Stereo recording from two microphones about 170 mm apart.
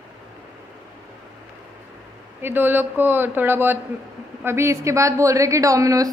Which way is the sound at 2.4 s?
10° right (ahead or behind).